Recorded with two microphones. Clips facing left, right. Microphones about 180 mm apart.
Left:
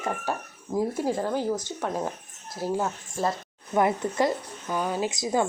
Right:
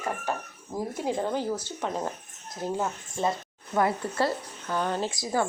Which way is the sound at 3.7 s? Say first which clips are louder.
Left 2 dB; 20° left (ahead or behind).